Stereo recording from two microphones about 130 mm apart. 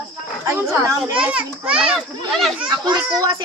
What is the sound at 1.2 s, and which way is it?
A child's voice, 10° right (ahead or behind).